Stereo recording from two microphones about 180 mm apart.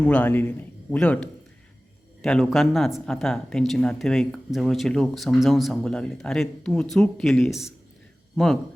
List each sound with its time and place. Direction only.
0.0 s a man's voice: 10° left (ahead or behind)